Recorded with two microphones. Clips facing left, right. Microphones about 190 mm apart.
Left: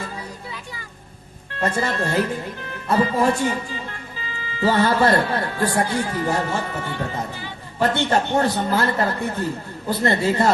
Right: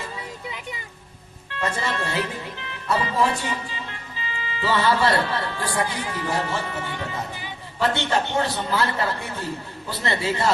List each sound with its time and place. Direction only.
1.5 s speech: 45° left (ahead or behind)